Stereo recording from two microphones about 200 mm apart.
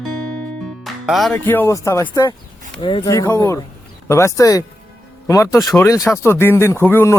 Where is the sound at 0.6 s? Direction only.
Centre (ahead or behind).